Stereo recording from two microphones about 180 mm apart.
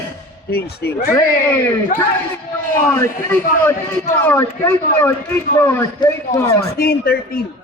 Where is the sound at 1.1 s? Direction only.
15° left (ahead or behind).